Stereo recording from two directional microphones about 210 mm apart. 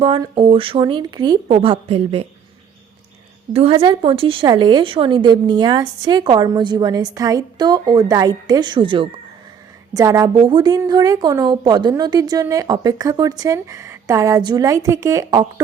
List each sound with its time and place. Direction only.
0.0 s speech: 25° right (ahead or behind)
3.5 s a woman's voice: 25° right (ahead or behind)